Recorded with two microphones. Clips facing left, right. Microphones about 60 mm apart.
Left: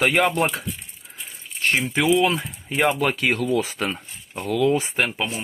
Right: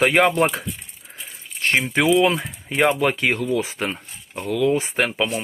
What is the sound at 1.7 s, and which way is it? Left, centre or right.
Speech, right.